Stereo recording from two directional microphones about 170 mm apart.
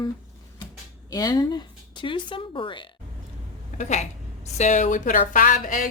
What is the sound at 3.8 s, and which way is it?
A woman's voice, 45° left (ahead or behind).